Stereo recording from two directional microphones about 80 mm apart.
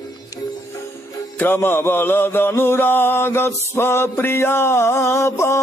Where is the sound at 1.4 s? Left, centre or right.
Left.